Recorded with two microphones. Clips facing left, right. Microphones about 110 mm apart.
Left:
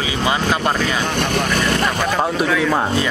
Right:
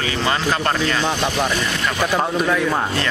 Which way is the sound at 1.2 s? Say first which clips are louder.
Left 2 dB; 55° left (ahead or behind).